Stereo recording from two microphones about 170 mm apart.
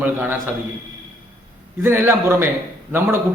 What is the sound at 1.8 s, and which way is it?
A man's voice, 15° right (ahead or behind).